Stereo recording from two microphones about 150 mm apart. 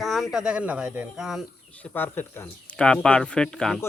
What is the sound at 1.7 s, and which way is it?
Speech, 10° left (ahead or behind).